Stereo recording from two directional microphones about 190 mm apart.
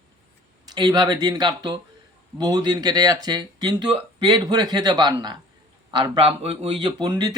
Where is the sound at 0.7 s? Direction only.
20° right (ahead or behind).